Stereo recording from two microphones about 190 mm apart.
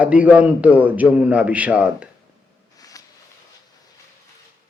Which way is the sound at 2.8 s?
20° left (ahead or behind).